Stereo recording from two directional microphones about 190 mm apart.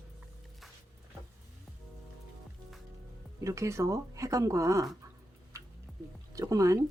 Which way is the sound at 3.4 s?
15° right (ahead or behind).